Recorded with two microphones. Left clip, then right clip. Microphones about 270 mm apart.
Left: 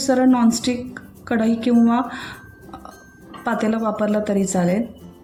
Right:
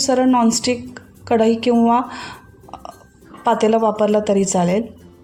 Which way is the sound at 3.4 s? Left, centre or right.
Right.